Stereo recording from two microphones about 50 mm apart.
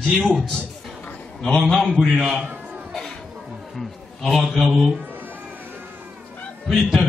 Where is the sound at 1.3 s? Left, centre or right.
Centre.